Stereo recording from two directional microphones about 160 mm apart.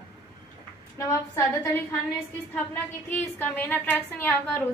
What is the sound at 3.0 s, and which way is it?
A woman's voice, 10° left (ahead or behind).